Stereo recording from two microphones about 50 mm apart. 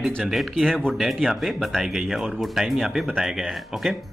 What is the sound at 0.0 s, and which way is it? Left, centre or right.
Speech, centre.